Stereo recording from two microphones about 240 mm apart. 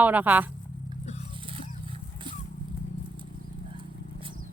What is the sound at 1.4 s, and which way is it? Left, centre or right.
Vehicle, right.